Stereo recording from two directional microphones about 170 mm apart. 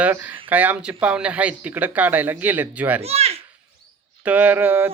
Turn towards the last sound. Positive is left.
turn(degrees=-10)  # may be behind; listen again after turning